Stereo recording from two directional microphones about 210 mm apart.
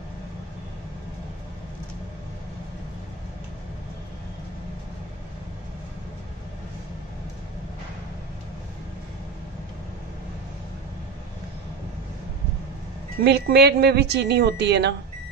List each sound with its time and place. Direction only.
13.2 s a woman's voice: 50° right (ahead or behind)